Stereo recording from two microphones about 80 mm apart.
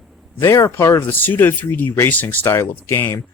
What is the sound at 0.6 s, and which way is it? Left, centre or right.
Speech, left.